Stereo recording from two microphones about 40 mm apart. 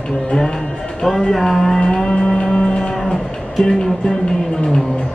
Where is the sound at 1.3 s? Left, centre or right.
Centre.